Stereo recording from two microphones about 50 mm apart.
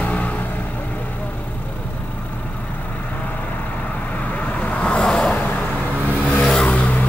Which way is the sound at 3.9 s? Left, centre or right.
Left.